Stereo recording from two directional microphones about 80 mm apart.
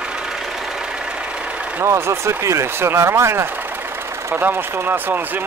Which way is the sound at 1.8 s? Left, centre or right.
Right.